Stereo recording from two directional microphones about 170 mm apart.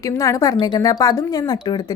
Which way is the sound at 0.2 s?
20° left (ahead or behind).